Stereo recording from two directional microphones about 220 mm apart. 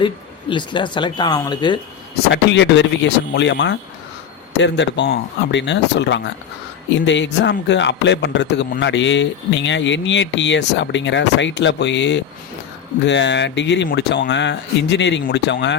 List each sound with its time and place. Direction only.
0.5 s speech: 20° left (ahead or behind)
2.3 s speech: 55° left (ahead or behind)